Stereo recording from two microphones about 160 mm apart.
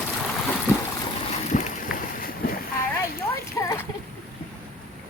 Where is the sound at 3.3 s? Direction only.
15° left (ahead or behind).